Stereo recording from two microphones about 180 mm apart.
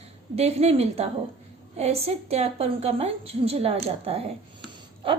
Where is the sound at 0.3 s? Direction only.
35° right (ahead or behind).